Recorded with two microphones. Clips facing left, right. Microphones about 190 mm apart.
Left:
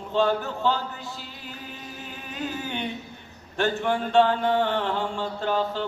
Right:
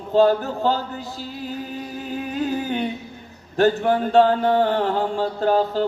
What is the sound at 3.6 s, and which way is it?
Music, 40° right (ahead or behind).